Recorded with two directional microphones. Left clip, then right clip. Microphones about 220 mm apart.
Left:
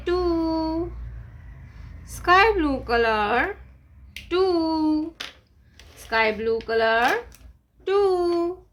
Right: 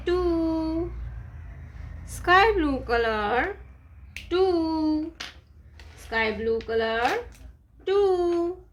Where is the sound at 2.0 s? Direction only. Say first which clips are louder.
Left 2 dB; 10° left (ahead or behind).